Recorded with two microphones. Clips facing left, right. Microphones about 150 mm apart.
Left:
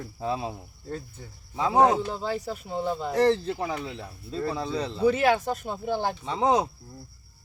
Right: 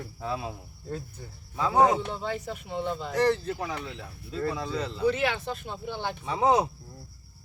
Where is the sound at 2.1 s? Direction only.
35° left (ahead or behind).